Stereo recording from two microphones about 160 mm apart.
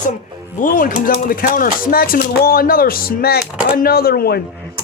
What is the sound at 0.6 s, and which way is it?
A man's voice, 60° left (ahead or behind).